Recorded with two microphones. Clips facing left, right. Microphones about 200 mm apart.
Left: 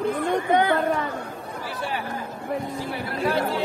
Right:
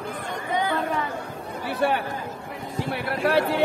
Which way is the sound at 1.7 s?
60° right (ahead or behind).